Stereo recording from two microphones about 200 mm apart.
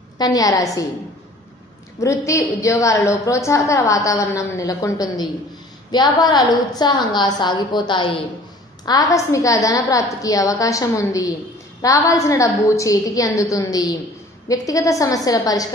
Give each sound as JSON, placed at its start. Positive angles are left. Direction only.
{"t": 0.2, "sound": "a woman's voice", "side_deg": 20}
{"t": 2.0, "sound": "a woman's voice", "side_deg": 15}